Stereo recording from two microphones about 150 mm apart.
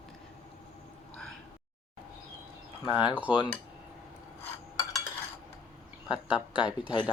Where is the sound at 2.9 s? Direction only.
5° right (ahead or behind).